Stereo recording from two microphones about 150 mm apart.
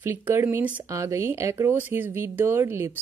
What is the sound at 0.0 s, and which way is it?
Speech, 15° right (ahead or behind).